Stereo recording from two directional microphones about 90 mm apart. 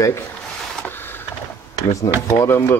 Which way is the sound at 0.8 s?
25° left (ahead or behind).